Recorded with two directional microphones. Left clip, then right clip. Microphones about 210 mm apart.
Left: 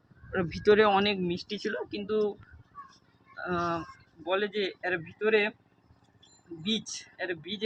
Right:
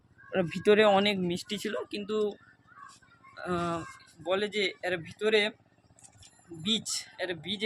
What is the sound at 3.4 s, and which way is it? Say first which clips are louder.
Speech: left 2 dB; 20° right (ahead or behind).